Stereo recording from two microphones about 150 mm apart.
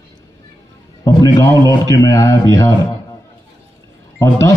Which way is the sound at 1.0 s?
20° left (ahead or behind).